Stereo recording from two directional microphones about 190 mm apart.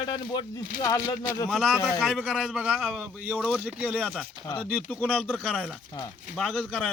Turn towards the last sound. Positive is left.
turn(degrees=5)  # may be behind; listen again after turning